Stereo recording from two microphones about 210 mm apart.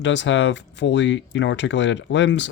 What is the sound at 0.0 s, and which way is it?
Speech, 60° left (ahead or behind).